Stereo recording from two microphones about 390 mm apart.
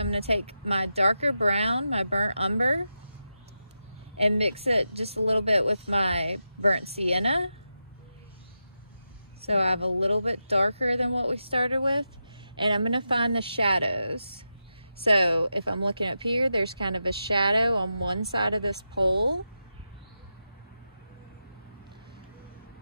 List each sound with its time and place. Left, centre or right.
0.0 s speech: centre
4.2 s speech: centre
9.4 s speech: centre